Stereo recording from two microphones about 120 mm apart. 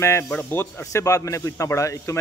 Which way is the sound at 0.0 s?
20° left (ahead or behind).